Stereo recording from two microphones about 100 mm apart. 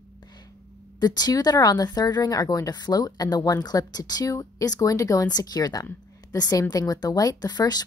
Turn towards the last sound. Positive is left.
turn(degrees=40)  # may be behind; listen again after turning